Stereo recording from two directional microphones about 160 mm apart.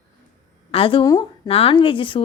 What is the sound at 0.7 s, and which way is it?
A woman's voice, 35° left (ahead or behind).